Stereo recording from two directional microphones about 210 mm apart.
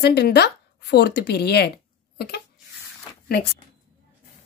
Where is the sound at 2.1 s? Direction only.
50° left (ahead or behind).